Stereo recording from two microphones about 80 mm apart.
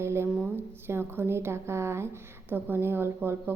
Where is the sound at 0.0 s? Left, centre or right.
Right.